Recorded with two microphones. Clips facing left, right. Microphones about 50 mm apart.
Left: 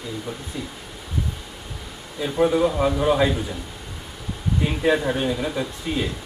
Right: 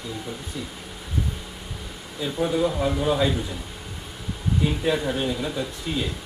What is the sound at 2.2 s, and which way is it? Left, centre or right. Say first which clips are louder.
Speech: left 4 dB; left.